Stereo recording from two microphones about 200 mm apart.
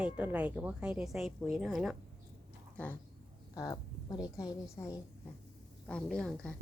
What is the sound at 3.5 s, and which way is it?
A woman's voice, 15° left (ahead or behind).